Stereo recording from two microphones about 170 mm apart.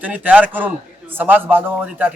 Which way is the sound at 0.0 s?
10° right (ahead or behind).